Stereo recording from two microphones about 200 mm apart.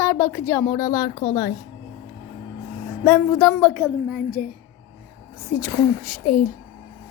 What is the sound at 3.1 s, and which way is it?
Speech, 10° left (ahead or behind).